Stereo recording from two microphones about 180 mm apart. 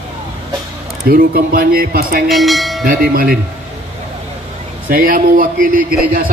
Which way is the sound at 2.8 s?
50° right (ahead or behind).